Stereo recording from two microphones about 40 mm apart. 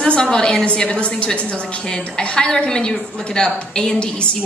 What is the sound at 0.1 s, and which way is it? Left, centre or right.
A woman's voice, left.